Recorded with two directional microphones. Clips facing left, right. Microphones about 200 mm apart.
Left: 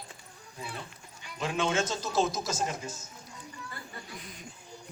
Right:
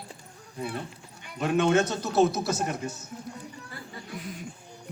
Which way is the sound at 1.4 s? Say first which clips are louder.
Right 7 dB; 60° right (ahead or behind).